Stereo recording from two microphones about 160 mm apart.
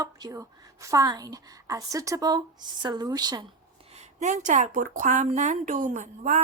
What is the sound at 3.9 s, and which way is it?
A woman's voice, 50° right (ahead or behind).